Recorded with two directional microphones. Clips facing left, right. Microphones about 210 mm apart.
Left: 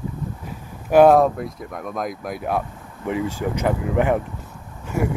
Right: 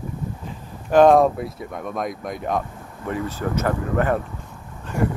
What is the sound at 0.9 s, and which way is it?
Speech, 10° left (ahead or behind).